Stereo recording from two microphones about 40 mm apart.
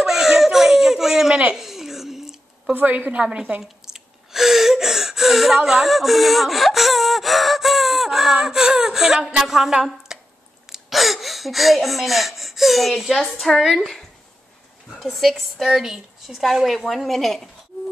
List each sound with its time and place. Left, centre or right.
0.0 s baby cry: centre
1.6 s a sound: centre
2.7 s a woman's voice: right
3.1 s a woman's voice: right
3.8 s speech: centre
5.7 s gasp: centre
9.4 s a sound: centre
10.7 s speech: centre
15.0 s a woman's voice: centre
16.6 s a woman's voice: centre